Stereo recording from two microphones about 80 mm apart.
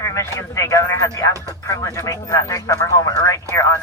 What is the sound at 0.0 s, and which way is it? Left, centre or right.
Speech, left.